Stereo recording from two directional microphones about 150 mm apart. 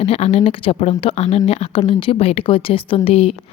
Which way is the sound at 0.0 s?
45° left (ahead or behind).